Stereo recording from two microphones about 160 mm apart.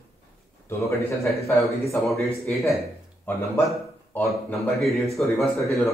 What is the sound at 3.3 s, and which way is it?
A man's voice, 10° left (ahead or behind).